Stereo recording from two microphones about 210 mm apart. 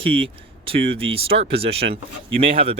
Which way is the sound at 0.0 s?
25° right (ahead or behind).